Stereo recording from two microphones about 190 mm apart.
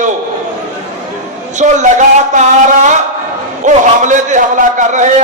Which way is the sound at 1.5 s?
40° right (ahead or behind).